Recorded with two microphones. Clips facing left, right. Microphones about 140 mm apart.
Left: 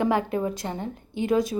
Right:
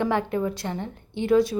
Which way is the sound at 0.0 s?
20° left (ahead or behind).